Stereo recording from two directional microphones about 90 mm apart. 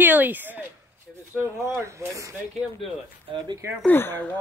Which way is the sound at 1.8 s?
35° right (ahead or behind).